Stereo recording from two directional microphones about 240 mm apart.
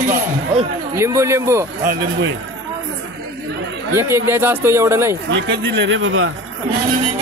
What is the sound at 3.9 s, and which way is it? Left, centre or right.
Speech, centre.